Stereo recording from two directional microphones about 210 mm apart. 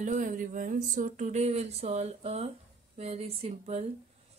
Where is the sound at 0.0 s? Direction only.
35° right (ahead or behind).